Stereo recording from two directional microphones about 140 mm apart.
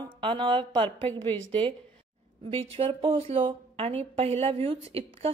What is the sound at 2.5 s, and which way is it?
A woman's voice, 45° right (ahead or behind).